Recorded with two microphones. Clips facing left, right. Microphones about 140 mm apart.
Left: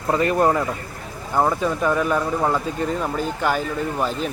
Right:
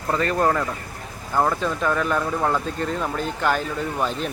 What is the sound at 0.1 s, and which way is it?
Speech, 15° left (ahead or behind).